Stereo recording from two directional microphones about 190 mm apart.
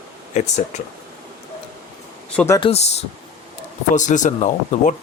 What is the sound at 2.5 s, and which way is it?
Speech, 30° left (ahead or behind).